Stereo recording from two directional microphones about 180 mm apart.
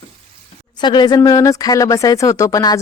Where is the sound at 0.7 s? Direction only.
25° left (ahead or behind).